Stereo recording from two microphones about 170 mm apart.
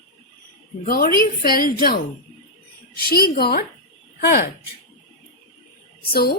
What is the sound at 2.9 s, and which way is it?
Speech, 60° left (ahead or behind).